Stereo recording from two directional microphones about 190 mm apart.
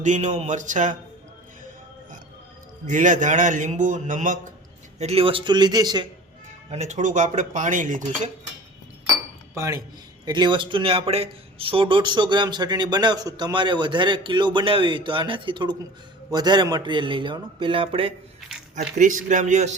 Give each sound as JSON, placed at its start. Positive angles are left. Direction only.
{"t": 0.0, "sound": "speech", "side_deg": -40}
{"t": 2.8, "sound": "speech", "side_deg": -40}
{"t": 4.9, "sound": "speech", "side_deg": -35}
{"t": 6.7, "sound": "speech", "side_deg": -35}
{"t": 9.6, "sound": "speech", "side_deg": -15}
{"t": 18.3, "sound": "squish", "side_deg": 0}
{"t": 18.9, "sound": "speech", "side_deg": -45}